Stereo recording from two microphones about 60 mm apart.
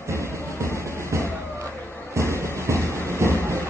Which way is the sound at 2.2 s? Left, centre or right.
Right.